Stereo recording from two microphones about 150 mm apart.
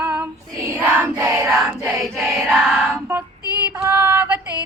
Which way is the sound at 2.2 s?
Centre (ahead or behind).